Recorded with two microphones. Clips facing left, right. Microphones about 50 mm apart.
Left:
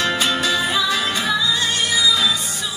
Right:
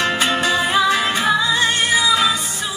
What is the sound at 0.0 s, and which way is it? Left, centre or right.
Music, right.